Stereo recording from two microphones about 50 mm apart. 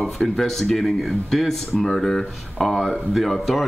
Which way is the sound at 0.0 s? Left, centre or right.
Centre.